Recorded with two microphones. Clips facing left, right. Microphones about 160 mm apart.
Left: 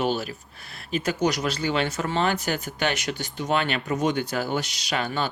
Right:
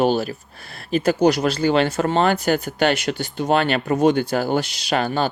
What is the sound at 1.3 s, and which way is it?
Speech, 30° right (ahead or behind).